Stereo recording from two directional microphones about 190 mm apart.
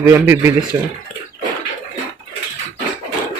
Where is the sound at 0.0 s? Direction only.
10° right (ahead or behind).